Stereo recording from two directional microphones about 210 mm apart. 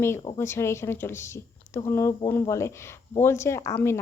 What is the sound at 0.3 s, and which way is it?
Speech, 10° left (ahead or behind).